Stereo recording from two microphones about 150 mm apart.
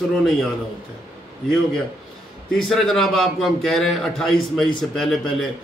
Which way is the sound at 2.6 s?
5° left (ahead or behind).